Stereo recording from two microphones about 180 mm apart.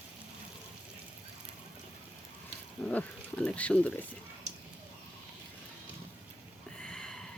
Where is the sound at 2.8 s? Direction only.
5° left (ahead or behind).